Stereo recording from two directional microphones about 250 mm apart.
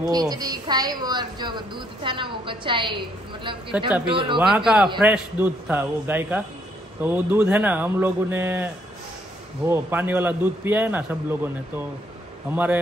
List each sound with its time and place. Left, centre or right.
0.0 s a woman's voice: centre
3.8 s a man's voice: centre
4.1 s speech: centre
4.4 s a man's voice: centre
9.7 s a woman's voice: centre